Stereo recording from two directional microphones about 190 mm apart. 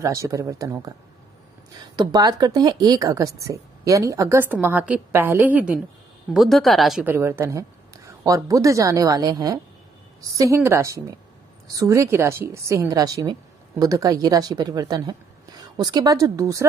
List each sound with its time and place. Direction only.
0.0 s a woman's voice: 15° right (ahead or behind)